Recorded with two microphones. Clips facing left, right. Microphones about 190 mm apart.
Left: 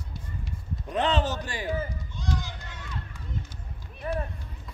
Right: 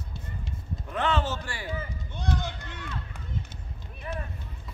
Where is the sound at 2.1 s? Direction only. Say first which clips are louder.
Right 3 dB; 60° right (ahead or behind).